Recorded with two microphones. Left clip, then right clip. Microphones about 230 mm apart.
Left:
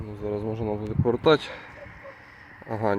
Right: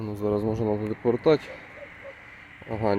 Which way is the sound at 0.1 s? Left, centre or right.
Right.